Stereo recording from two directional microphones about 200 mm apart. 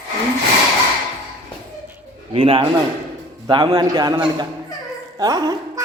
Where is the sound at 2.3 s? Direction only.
25° right (ahead or behind).